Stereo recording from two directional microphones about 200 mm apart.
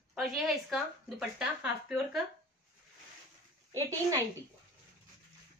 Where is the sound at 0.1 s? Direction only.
Centre (ahead or behind).